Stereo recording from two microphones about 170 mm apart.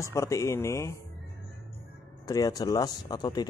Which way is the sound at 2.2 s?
20° left (ahead or behind).